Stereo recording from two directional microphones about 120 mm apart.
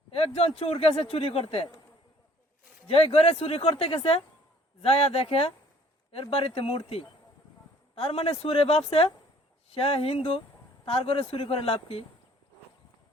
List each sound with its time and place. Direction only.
0.1 s speech: 55° left (ahead or behind)
2.8 s speech: 55° left (ahead or behind)